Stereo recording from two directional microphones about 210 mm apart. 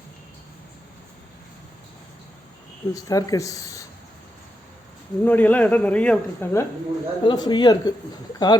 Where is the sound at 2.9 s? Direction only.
15° left (ahead or behind).